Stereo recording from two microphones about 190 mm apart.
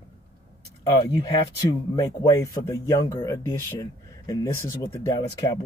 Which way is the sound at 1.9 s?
20° left (ahead or behind).